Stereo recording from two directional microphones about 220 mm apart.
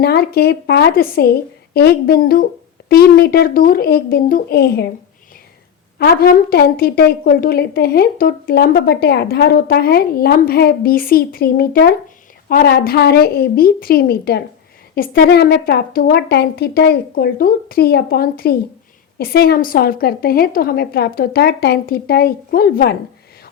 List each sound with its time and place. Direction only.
0.0 s a woman's voice: 45° left (ahead or behind)
6.0 s a woman's voice: 40° left (ahead or behind)